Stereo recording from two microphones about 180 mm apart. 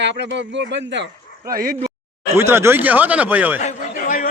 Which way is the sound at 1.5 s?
55° right (ahead or behind).